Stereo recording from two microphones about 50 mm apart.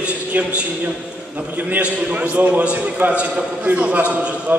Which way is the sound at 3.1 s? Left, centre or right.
Right.